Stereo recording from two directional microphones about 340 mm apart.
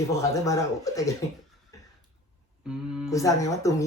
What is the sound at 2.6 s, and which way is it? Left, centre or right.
Speech, centre.